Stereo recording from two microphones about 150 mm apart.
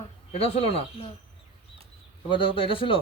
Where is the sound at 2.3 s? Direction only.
35° left (ahead or behind).